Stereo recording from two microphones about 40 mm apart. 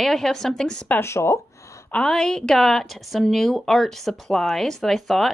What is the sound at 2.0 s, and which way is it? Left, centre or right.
Speech, centre.